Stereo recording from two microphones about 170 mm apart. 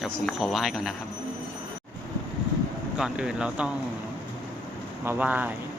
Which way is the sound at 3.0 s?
5° right (ahead or behind).